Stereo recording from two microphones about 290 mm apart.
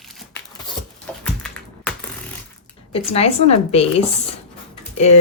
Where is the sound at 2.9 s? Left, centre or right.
Left.